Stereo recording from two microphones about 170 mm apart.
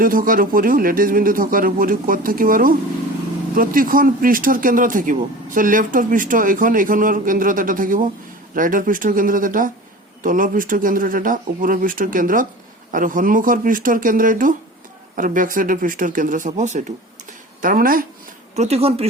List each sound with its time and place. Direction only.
0.0 s speech: 55° right (ahead or behind)
17.6 s speech: 55° right (ahead or behind)
18.5 s speech: 40° right (ahead or behind)